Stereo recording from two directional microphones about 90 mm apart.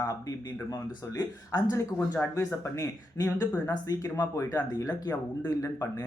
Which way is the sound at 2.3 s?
35° left (ahead or behind).